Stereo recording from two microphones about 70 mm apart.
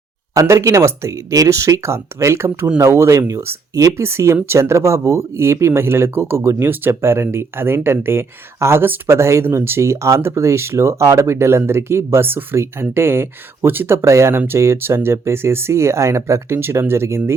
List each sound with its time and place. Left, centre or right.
0.3 s speech: right